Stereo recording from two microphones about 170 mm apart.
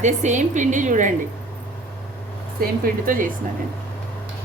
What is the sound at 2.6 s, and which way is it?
Speech, 55° right (ahead or behind).